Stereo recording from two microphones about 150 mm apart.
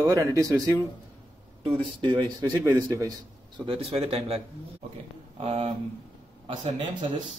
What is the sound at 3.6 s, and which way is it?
Speech, 40° right (ahead or behind).